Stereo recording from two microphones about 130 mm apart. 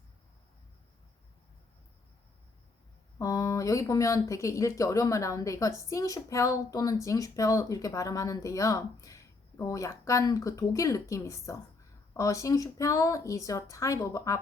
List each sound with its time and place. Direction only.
3.2 s speech: 25° left (ahead or behind)